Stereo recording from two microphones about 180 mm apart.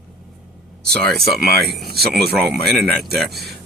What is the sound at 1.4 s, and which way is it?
Speech, 60° right (ahead or behind).